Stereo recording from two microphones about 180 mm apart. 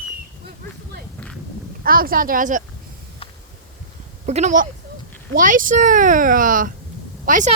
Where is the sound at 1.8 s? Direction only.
55° right (ahead or behind).